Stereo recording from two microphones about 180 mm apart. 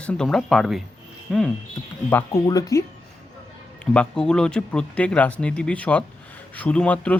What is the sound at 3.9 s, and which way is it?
Speech, 5° left (ahead or behind).